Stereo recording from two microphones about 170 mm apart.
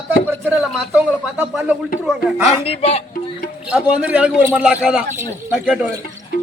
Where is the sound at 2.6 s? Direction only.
35° left (ahead or behind).